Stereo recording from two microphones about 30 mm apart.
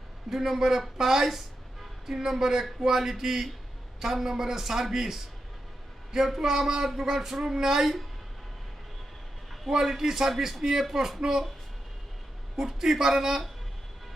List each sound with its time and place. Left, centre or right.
0.3 s speech: centre
9.6 s speech: centre
12.5 s speech: centre